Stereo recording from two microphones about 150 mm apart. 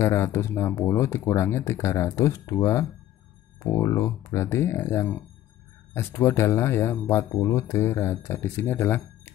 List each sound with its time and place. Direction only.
0.0 s speech: 15° left (ahead or behind)